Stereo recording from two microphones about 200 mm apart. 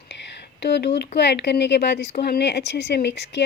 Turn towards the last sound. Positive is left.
turn(degrees=60)  # may be behind; listen again after turning